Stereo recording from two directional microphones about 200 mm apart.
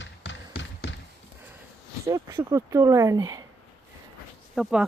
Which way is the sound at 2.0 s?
20° right (ahead or behind).